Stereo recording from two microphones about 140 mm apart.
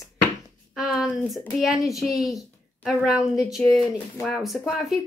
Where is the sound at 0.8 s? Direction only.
5° right (ahead or behind).